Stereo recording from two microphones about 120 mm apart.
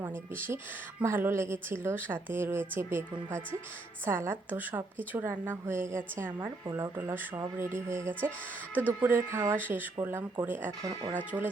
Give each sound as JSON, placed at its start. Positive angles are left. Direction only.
{"t": 0.0, "sound": "a woman's voice", "side_deg": -20}
{"t": 10.7, "sound": "speech", "side_deg": -35}